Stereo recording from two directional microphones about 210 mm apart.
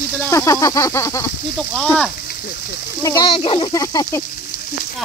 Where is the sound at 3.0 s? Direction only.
20° left (ahead or behind).